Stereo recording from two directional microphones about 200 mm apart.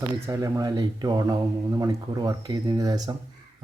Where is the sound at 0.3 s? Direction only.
15° right (ahead or behind).